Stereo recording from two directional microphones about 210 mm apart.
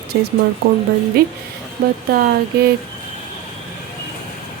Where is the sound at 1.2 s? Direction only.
45° right (ahead or behind).